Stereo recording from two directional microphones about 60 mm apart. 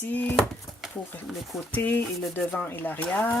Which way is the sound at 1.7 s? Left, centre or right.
Left.